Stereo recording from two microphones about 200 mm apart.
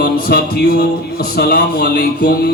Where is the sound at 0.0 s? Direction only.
50° left (ahead or behind).